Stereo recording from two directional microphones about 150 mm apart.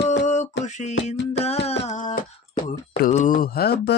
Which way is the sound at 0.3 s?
50° left (ahead or behind).